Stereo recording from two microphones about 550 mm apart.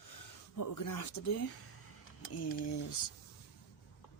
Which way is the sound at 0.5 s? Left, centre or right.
Left.